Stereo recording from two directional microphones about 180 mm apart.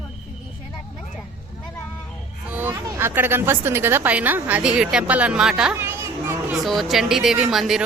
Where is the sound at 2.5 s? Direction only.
10° right (ahead or behind).